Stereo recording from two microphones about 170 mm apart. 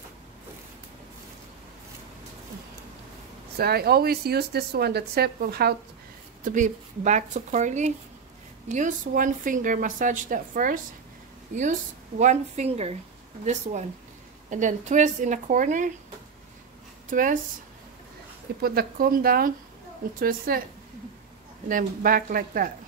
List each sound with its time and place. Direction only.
3.5 s speech: 65° right (ahead or behind)
6.4 s speech: 45° right (ahead or behind)
12.2 s a woman's voice: 45° right (ahead or behind)
17.1 s speech: 50° right (ahead or behind)
18.6 s a woman's voice: 60° right (ahead or behind)
21.6 s a woman's voice: 55° right (ahead or behind)